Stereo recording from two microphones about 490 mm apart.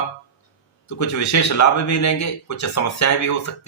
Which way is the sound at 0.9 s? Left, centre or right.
Left.